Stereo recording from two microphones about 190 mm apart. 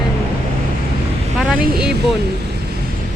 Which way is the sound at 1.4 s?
Centre (ahead or behind).